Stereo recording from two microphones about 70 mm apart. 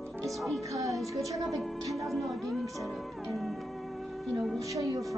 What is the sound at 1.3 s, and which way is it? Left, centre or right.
Speech, right.